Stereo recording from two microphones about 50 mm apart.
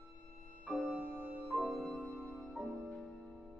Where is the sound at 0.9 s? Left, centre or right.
Centre.